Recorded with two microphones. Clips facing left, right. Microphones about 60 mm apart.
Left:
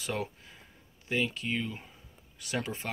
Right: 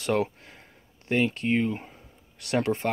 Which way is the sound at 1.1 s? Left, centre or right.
Right.